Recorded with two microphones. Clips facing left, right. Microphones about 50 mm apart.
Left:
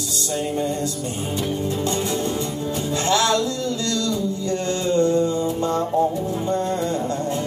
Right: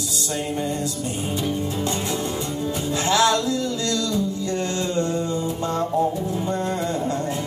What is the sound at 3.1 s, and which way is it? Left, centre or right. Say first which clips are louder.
Music: even; centre.